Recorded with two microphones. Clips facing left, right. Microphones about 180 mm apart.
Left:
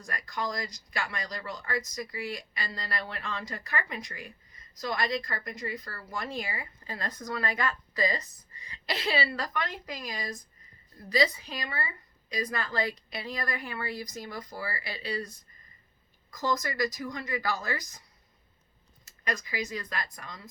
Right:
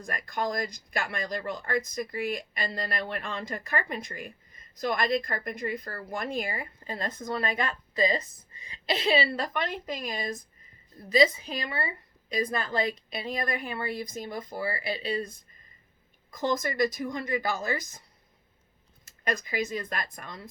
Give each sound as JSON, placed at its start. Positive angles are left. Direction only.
{"t": 0.0, "sound": "speech", "side_deg": -50}
{"t": 6.8, "sound": "speech", "side_deg": -25}
{"t": 11.1, "sound": "speech", "side_deg": -25}
{"t": 16.4, "sound": "speech", "side_deg": -25}
{"t": 19.0, "sound": "a sound", "side_deg": -50}
{"t": 19.6, "sound": "speech", "side_deg": -25}
{"t": 19.9, "sound": "speech", "side_deg": -50}